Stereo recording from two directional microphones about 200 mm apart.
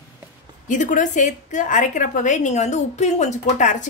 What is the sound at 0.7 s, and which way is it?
A woman's voice, 40° left (ahead or behind).